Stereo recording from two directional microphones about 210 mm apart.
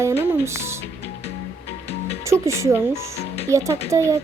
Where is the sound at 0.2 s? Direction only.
15° right (ahead or behind).